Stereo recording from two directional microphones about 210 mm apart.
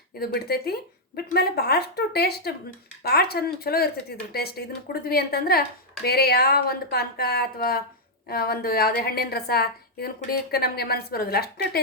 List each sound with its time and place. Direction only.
0.2 s a woman's voice: 50° left (ahead or behind)